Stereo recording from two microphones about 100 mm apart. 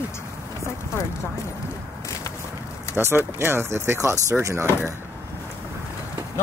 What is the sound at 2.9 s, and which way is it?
Speech, 25° right (ahead or behind).